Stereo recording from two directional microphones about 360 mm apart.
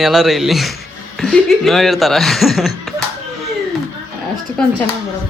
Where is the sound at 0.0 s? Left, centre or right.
Centre.